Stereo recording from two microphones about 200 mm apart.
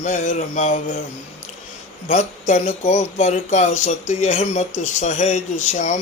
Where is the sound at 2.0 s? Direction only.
35° left (ahead or behind).